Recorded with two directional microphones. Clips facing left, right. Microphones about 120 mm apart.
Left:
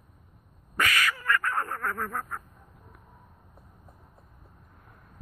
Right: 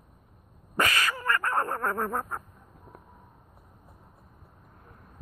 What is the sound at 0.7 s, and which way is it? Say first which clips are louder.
Duck: right 1 dB; 30° right (ahead or behind).